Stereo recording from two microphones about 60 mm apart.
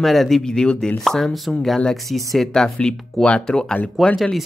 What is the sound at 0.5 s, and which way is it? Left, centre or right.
Speech, centre.